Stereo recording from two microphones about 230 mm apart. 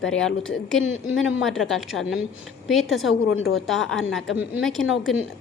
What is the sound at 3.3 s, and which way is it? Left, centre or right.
Speech, left.